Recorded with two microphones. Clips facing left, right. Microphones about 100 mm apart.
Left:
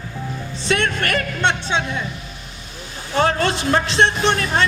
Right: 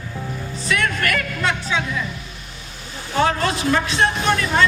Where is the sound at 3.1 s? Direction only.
35° left (ahead or behind).